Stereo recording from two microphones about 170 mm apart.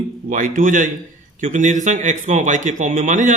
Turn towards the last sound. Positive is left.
turn(degrees=-45)  # may be behind; listen again after turning